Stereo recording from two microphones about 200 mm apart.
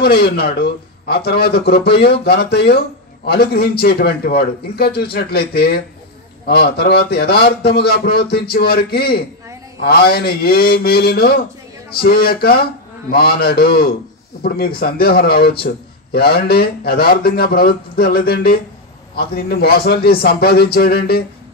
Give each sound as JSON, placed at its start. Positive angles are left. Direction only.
{"t": 0.0, "sound": "a man's voice", "side_deg": 50}